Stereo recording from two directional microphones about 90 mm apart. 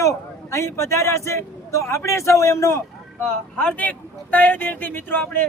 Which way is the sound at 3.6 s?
15° left (ahead or behind).